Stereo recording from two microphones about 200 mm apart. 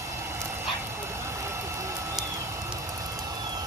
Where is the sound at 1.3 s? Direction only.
15° right (ahead or behind).